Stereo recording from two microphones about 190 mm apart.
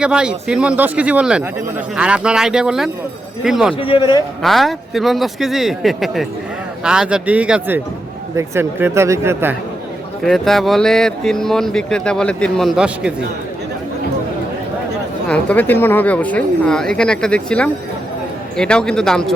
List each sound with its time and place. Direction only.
0.0 s speech: 5° right (ahead or behind)
3.8 s a man's voice: 30° left (ahead or behind)
4.4 s speech: centre (ahead or behind)
10.2 s speech: centre (ahead or behind)
15.3 s speech: 10° left (ahead or behind)